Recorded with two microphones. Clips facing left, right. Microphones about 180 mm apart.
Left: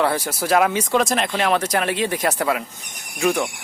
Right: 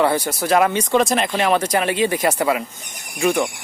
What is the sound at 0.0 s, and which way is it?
Speech, centre (ahead or behind).